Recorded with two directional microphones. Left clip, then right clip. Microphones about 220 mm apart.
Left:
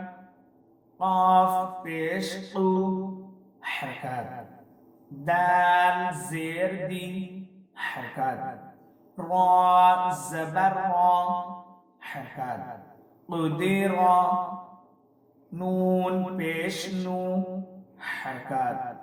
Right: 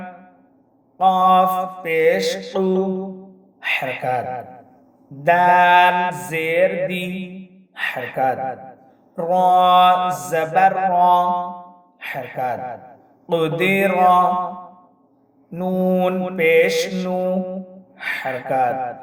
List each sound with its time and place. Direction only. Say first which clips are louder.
0.9 s mantra: right 7 dB; 40° right (ahead or behind)
15.5 s mantra: right 7 dB; 40° right (ahead or behind)